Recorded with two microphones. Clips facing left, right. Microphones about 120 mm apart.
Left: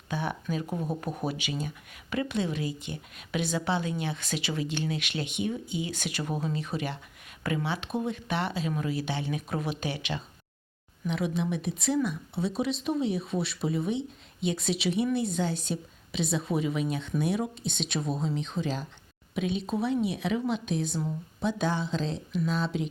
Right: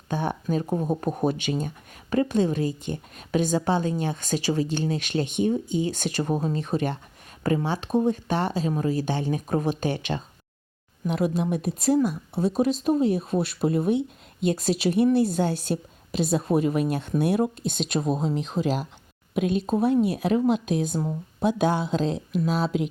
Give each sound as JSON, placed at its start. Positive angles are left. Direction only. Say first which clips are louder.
{"t": 0.1, "sound": "a woman's voice", "louder": "right 5 dB", "side_deg": -40}
{"t": 17.7, "sound": "a woman's voice", "louder": "right 6 dB", "side_deg": -45}
{"t": 18.6, "sound": "speech", "louder": "right 7 dB", "side_deg": -85}
{"t": 19.3, "sound": "a woman's voice", "louder": "right 6 dB", "side_deg": -50}